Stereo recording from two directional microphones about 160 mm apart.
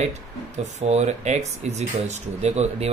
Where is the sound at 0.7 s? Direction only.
45° right (ahead or behind).